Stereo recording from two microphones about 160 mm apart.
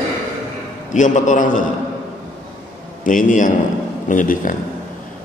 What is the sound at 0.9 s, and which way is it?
Speech, 50° left (ahead or behind).